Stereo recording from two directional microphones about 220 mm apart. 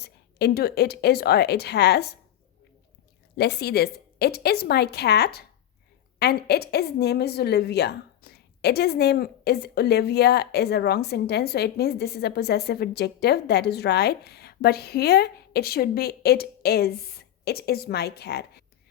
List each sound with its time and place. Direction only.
0.0 s a woman's voice: 45° left (ahead or behind)
3.3 s a woman's voice: 50° left (ahead or behind)